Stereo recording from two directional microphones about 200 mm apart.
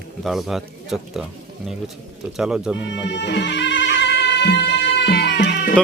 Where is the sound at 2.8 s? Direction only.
60° left (ahead or behind).